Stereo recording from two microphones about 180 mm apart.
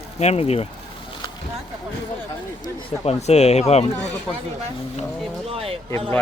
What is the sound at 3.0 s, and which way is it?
Speech, 35° left (ahead or behind).